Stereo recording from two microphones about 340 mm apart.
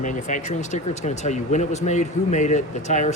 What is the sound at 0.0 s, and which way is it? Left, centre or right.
Speech, left.